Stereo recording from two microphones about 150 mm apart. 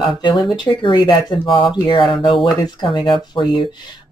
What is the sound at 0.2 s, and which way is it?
Speech, 30° left (ahead or behind).